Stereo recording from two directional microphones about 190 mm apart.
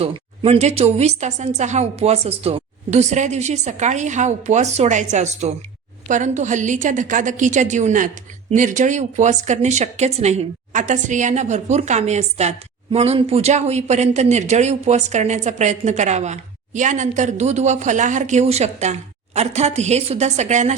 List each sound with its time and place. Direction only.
0.0 s a woman's voice: 30° right (ahead or behind)